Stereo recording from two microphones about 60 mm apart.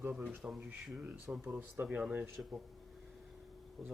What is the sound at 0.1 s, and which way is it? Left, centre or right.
Speech, centre.